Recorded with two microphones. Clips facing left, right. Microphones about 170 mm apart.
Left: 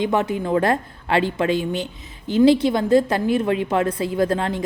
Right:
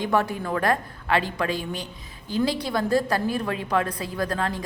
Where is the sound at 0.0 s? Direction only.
20° left (ahead or behind).